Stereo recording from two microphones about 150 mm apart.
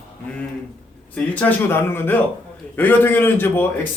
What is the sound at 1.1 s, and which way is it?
A man's voice, 10° left (ahead or behind).